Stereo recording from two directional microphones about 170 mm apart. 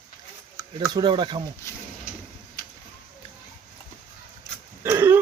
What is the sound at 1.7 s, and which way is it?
Speech, 15° left (ahead or behind).